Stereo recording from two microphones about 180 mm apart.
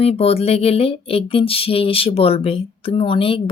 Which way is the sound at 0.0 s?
35° left (ahead or behind).